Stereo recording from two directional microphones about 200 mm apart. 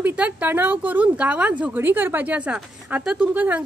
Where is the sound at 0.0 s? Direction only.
5° right (ahead or behind).